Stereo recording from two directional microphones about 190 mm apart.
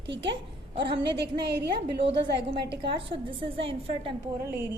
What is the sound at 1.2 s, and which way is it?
Speech, 60° right (ahead or behind).